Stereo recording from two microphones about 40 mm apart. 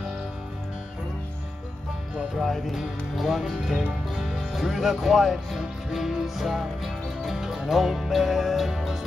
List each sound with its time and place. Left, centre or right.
2.3 s speech: centre
4.1 s music: centre
4.5 s speech: centre